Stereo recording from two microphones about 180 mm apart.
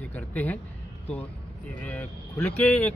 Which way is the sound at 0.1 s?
10° left (ahead or behind).